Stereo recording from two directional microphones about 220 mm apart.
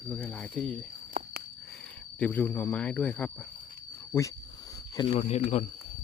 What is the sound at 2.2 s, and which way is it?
Speech, 5° left (ahead or behind).